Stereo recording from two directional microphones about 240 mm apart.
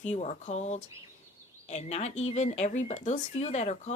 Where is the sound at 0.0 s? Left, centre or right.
Left.